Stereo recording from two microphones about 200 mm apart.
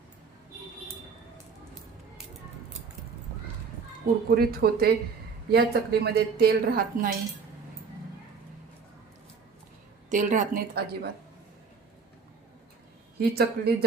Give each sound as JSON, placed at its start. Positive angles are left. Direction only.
{"t": 4.3, "sound": "a woman's voice", "side_deg": -50}
{"t": 10.1, "sound": "a woman's voice", "side_deg": -40}
{"t": 13.1, "sound": "a woman's voice", "side_deg": -50}